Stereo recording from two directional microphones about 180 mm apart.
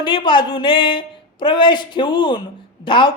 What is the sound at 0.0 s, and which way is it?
A man's voice, 25° left (ahead or behind).